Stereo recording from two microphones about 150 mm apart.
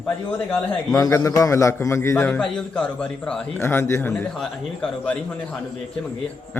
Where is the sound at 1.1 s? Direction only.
20° left (ahead or behind).